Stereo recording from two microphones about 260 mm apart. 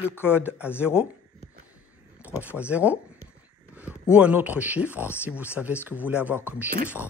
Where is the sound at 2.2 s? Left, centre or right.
Centre.